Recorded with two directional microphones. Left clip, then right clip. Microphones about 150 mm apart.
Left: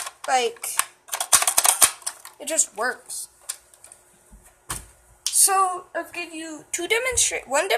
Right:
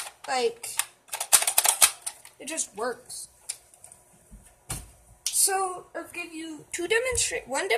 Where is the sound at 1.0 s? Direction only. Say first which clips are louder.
Left 3 dB; centre (ahead or behind).